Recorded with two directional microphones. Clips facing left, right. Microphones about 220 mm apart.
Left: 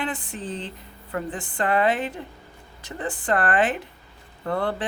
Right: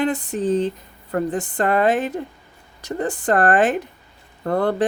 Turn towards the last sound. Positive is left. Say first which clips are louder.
# right 5 dB
turn(degrees=-45)  # may be behind; listen again after turning